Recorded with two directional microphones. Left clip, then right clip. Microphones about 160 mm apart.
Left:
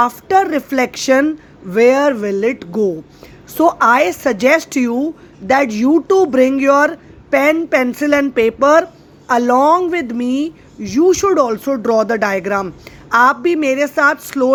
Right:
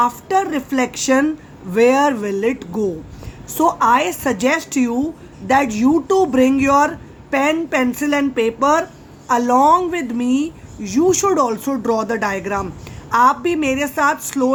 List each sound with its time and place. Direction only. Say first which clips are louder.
0.0 s a woman's voice: left 4 dB; 30° left (ahead or behind)